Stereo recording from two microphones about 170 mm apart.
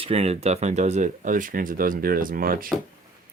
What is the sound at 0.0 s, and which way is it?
Speech, 35° right (ahead or behind).